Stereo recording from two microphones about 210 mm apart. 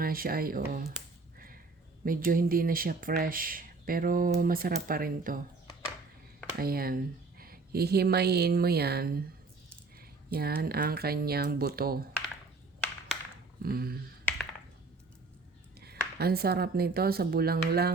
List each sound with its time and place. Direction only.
0.0 s speech: 45° right (ahead or behind)
1.4 s sniff: 45° right (ahead or behind)
2.0 s speech: 40° right (ahead or behind)
6.6 s speech: 45° right (ahead or behind)
13.6 s speech: 45° right (ahead or behind)
15.8 s speech: 50° right (ahead or behind)